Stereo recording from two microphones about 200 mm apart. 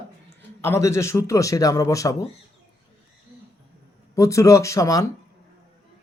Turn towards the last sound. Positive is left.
turn(degrees=15)  # may be behind; listen again after turning